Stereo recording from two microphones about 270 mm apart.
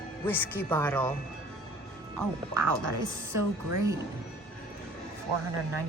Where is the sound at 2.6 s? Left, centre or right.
Right.